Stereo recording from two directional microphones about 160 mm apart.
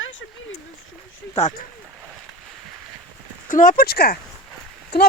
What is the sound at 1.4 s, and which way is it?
Speech, 50° left (ahead or behind).